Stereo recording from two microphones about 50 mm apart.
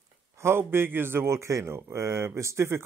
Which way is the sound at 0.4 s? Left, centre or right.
Right.